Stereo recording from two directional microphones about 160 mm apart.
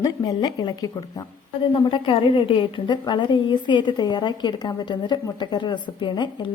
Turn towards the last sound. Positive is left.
turn(degrees=30)  # may be behind; listen again after turning